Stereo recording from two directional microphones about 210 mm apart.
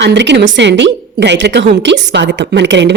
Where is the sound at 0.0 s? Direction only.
55° right (ahead or behind).